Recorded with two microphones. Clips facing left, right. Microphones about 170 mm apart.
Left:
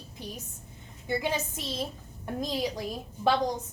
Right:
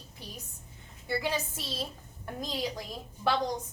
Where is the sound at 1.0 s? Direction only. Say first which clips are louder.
Left 2 dB; 20° left (ahead or behind).